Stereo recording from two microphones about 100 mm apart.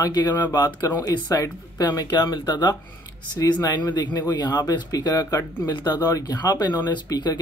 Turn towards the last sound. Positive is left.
turn(degrees=45)  # may be behind; listen again after turning